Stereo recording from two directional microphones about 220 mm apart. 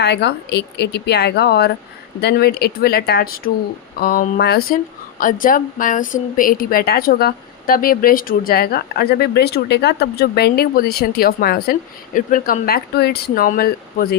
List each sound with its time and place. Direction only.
0.0 s speech: 50° left (ahead or behind)